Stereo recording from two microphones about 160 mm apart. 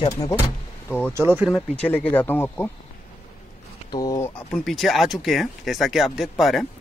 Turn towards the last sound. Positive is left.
turn(degrees=0)  # may be behind; listen again after turning